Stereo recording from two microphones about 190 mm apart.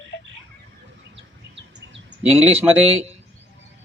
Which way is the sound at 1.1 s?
70° right (ahead or behind).